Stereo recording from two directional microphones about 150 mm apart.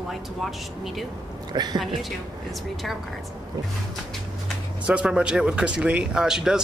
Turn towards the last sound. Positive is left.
turn(degrees=-5)  # may be behind; listen again after turning